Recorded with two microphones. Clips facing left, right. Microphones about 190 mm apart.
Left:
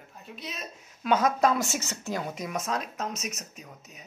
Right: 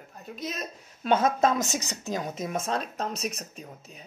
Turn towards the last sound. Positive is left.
turn(degrees=-30)  # may be behind; listen again after turning